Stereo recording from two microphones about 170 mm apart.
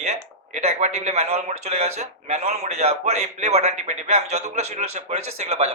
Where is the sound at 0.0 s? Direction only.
40° right (ahead or behind).